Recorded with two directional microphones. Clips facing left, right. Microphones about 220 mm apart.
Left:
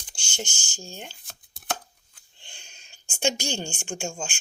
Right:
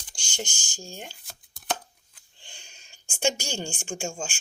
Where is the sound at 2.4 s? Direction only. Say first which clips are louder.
Even; 10° right (ahead or behind).